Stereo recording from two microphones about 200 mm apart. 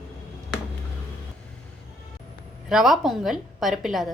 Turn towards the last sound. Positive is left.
turn(degrees=0)  # may be behind; listen again after turning